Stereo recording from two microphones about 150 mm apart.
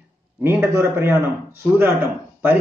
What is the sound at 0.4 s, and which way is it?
Speech, 15° right (ahead or behind).